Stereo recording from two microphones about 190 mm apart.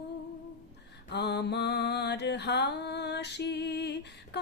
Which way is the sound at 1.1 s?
60° left (ahead or behind).